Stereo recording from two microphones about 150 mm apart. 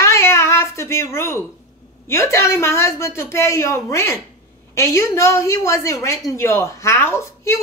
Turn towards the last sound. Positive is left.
turn(degrees=20)  # may be behind; listen again after turning